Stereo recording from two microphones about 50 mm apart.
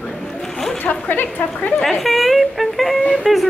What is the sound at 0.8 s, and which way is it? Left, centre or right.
Speech, left.